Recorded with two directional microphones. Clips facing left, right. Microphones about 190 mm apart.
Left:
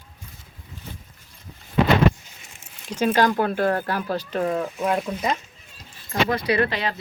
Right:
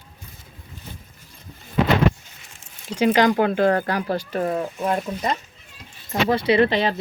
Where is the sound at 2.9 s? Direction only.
20° right (ahead or behind).